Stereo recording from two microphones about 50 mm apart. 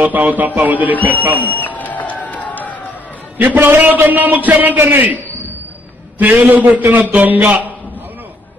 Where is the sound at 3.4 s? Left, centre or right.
Right.